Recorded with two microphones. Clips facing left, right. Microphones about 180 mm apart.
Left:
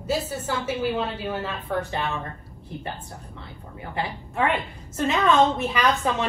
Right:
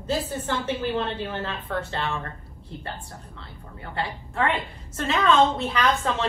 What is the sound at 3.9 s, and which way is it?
Speech, 15° left (ahead or behind).